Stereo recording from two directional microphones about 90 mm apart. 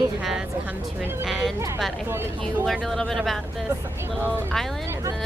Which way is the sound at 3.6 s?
25° right (ahead or behind).